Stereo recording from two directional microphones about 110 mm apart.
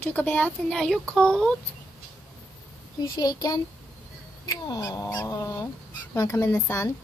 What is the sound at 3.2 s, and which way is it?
A woman's voice, 35° left (ahead or behind).